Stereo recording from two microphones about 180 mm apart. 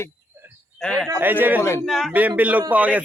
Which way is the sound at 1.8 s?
Centre (ahead or behind).